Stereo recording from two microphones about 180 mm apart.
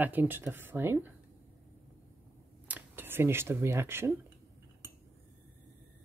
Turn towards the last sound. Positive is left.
turn(degrees=-15)  # may be behind; listen again after turning